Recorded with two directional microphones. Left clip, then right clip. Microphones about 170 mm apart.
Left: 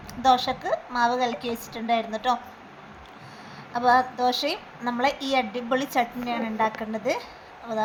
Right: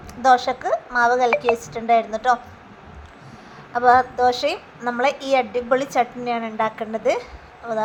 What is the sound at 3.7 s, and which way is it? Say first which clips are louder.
A woman's voice: right 5 dB; 20° right (ahead or behind).